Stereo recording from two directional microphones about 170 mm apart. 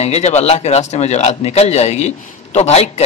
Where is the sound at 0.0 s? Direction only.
40° left (ahead or behind).